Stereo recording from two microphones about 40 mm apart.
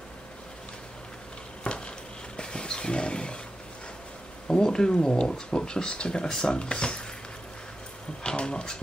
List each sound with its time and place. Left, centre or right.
1.6 s a sound: left
4.5 s speech: centre
8.2 s speech: left